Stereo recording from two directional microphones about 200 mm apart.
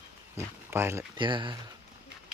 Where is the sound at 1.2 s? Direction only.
25° right (ahead or behind).